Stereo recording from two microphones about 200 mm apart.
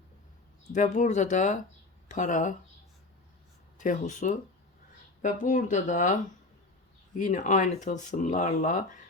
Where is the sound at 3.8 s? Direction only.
40° left (ahead or behind).